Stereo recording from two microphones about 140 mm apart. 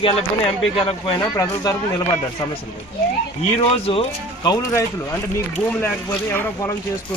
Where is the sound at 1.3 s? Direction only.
25° left (ahead or behind).